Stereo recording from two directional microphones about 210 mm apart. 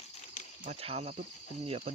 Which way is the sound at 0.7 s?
30° right (ahead or behind).